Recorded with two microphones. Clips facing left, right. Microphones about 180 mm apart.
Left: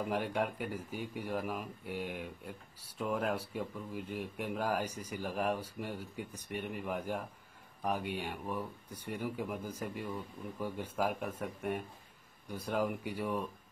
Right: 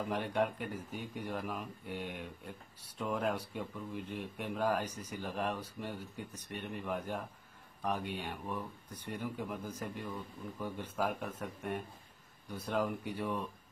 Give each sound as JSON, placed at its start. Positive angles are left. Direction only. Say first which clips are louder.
{"t": 0.1, "sound": "speech", "louder": "right 3 dB", "side_deg": 5}